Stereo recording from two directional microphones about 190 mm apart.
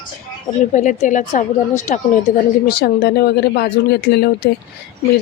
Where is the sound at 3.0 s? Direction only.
60° left (ahead or behind).